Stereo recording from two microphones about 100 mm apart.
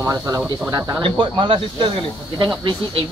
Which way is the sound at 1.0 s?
60° right (ahead or behind).